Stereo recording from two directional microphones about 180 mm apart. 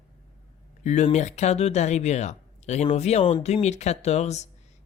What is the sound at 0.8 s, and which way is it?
Speech, 40° left (ahead or behind).